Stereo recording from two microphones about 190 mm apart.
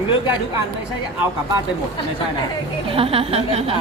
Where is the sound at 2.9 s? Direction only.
30° right (ahead or behind).